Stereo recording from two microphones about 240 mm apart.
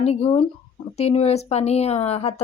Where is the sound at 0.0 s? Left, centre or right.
Left.